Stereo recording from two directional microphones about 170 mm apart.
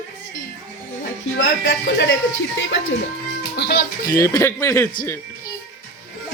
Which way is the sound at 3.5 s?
85° left.